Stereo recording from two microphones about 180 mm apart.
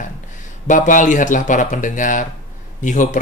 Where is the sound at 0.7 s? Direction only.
45° left (ahead or behind).